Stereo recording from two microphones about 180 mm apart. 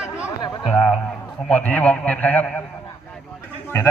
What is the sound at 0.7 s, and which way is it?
A man's voice, 10° left (ahead or behind).